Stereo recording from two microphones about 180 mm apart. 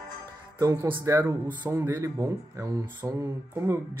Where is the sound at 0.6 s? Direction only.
20° right (ahead or behind).